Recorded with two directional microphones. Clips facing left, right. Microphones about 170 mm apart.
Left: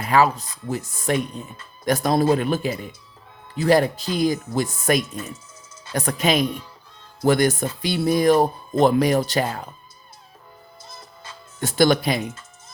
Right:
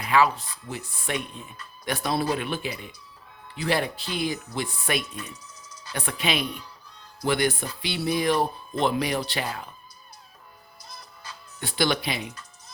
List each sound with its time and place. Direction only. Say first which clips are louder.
0.0 s speech: left 3 dB; 40° left (ahead or behind)
10.8 s music: left 1 dB; 25° left (ahead or behind)
11.6 s speech: left 8 dB; 45° left (ahead or behind)
12.3 s music: left 4 dB; 25° left (ahead or behind)